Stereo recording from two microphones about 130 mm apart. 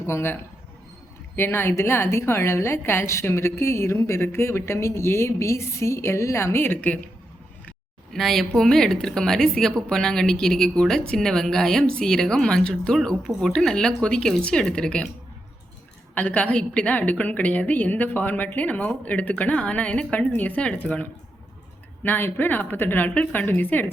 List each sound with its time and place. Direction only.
0.0 s a woman's voice: 20° left (ahead or behind)
8.1 s speech: 5° left (ahead or behind)
16.1 s a woman's voice: 10° left (ahead or behind)